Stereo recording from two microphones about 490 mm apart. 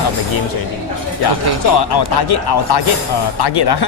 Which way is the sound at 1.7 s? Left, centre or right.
Left.